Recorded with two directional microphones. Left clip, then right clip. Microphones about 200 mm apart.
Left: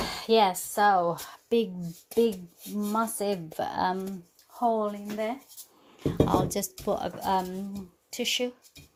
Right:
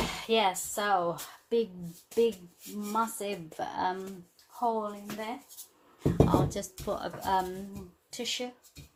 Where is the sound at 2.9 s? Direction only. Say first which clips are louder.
Left 3 dB; 45° left (ahead or behind).